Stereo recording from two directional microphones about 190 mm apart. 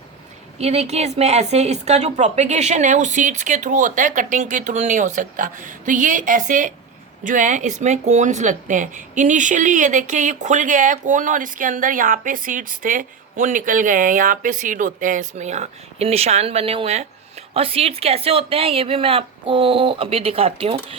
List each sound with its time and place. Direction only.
0.6 s speech: 35° right (ahead or behind)